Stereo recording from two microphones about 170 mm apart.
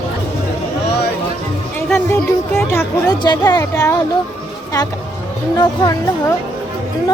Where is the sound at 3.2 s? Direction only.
25° left (ahead or behind).